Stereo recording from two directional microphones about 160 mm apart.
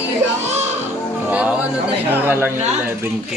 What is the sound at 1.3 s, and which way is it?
Speech, 10° right (ahead or behind).